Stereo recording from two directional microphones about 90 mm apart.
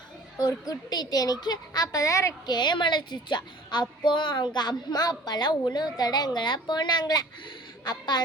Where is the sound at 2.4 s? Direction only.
55° left (ahead or behind).